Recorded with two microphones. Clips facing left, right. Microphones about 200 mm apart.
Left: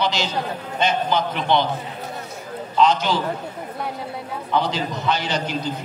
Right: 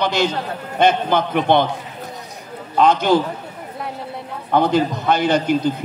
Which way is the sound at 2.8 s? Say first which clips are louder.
Right 4 dB; 55° right (ahead or behind).